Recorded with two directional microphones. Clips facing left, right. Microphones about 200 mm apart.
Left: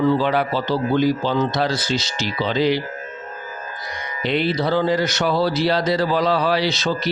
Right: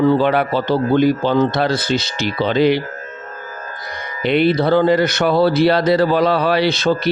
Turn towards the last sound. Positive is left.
turn(degrees=-55)  # may be behind; listen again after turning